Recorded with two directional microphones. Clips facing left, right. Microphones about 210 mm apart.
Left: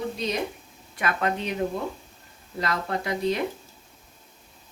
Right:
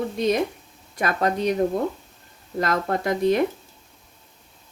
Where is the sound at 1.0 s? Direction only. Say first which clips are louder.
Right 4 dB; 40° right (ahead or behind).